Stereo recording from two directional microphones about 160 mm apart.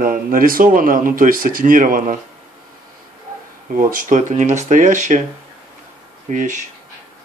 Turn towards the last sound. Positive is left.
turn(degrees=-50)  # may be behind; listen again after turning